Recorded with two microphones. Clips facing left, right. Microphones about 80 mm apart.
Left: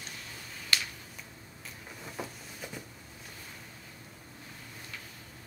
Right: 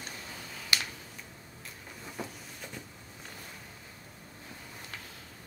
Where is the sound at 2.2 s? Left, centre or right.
Centre.